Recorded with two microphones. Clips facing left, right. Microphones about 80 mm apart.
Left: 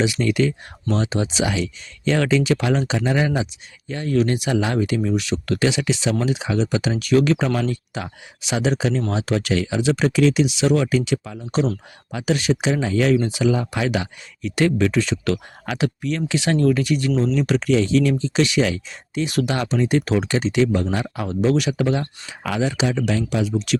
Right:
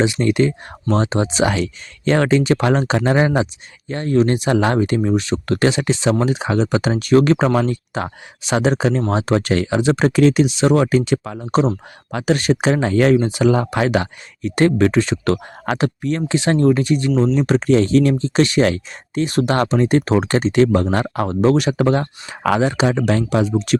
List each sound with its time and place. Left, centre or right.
0.0 s speech: right